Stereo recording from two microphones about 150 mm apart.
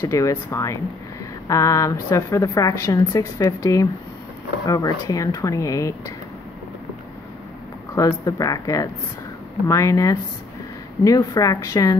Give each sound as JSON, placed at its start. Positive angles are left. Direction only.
{"t": 0.0, "sound": "a woman's voice", "side_deg": 20}
{"t": 7.9, "sound": "a woman's voice", "side_deg": 25}